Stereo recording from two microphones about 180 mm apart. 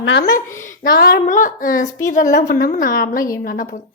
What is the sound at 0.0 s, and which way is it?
Speech, 90° left.